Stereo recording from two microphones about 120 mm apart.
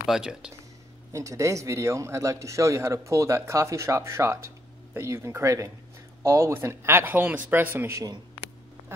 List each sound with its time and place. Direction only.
0.0 s speech: 5° right (ahead or behind)
1.1 s a man's voice: 25° right (ahead or behind)